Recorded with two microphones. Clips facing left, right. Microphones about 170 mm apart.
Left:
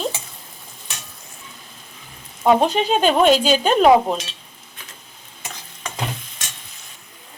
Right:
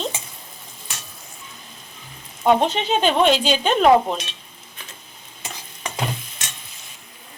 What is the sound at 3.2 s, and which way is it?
Speech, 45° left (ahead or behind).